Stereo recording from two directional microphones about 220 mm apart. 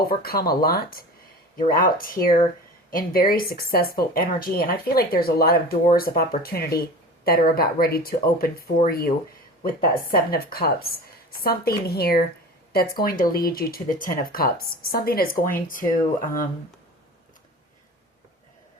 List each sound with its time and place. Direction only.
0.1 s speech: 45° left (ahead or behind)